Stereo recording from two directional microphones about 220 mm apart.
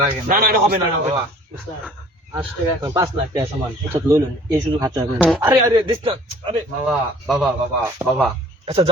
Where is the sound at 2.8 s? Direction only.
15° right (ahead or behind).